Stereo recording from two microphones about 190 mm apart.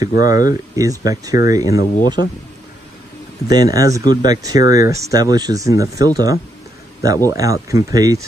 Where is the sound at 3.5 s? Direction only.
20° right (ahead or behind).